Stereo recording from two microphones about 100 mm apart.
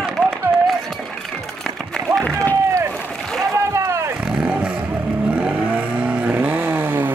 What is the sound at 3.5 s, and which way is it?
Boat, 30° right (ahead or behind).